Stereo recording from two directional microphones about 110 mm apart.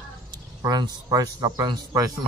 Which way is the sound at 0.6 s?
35° right (ahead or behind).